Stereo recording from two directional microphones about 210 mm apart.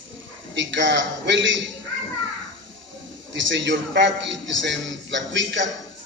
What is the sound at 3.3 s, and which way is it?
A man's voice, 60° right (ahead or behind).